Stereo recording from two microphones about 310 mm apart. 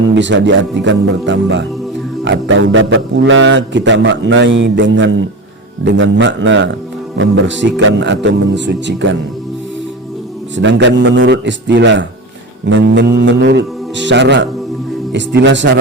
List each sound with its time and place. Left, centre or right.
0.1 s a man's voice: right
10.6 s a man's voice: right